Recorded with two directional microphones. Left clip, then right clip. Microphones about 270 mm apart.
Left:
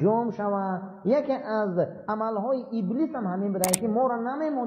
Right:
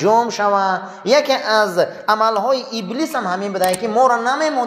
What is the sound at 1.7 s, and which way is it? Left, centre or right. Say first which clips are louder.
Speech: right 11 dB; centre.